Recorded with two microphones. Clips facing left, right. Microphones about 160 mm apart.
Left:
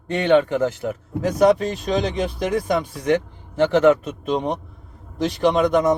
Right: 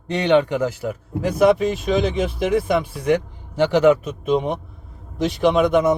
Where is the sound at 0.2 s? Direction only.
20° right (ahead or behind).